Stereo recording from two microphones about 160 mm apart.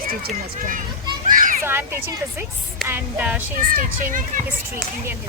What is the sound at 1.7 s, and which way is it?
Speech, 15° right (ahead or behind).